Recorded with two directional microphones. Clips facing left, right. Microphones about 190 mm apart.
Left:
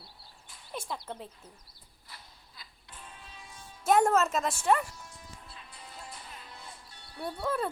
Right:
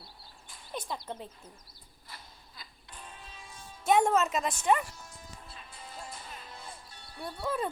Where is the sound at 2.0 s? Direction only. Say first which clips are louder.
Right 2 dB; 45° right (ahead or behind).